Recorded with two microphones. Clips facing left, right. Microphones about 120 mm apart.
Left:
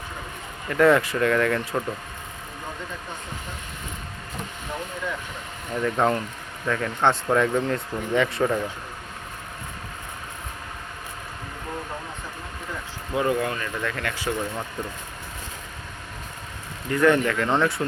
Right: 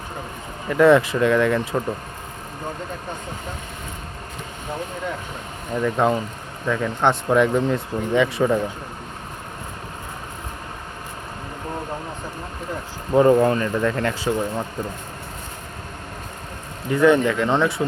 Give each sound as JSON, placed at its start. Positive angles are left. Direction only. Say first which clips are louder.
{"t": 0.7, "sound": "speech", "louder": "right 4 dB", "side_deg": -20}
{"t": 5.8, "sound": "speech", "louder": "right 2 dB", "side_deg": -10}
{"t": 13.1, "sound": "speech", "louder": "right 9 dB", "side_deg": -35}
{"t": 16.9, "sound": "speech", "louder": "right 3 dB", "side_deg": -15}